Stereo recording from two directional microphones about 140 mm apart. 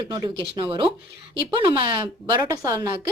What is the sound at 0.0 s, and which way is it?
A woman's voice, 30° right (ahead or behind).